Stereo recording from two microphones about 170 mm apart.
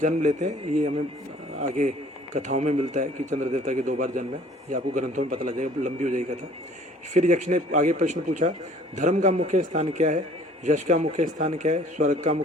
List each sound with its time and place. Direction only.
0.0 s speech: 45° right (ahead or behind)
2.3 s speech: 45° right (ahead or behind)